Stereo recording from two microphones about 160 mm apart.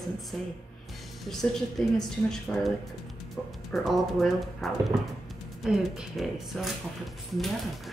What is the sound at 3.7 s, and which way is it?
A woman's voice, centre (ahead or behind).